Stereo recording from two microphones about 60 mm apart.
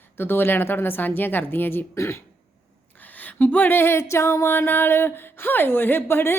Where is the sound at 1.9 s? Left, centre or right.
Left.